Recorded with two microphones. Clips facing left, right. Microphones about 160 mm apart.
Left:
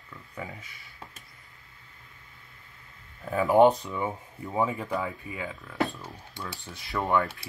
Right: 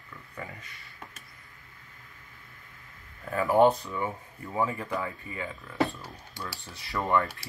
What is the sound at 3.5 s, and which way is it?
Speech, 15° left (ahead or behind).